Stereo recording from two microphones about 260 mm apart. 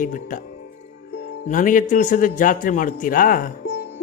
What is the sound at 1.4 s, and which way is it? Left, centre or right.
A man's voice, left.